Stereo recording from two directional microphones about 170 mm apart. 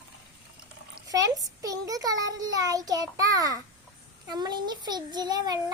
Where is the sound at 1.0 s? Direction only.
20° right (ahead or behind).